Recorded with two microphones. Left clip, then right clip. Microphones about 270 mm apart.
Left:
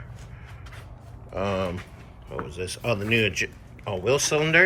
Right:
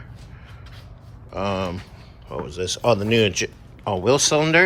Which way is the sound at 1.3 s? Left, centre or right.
Centre.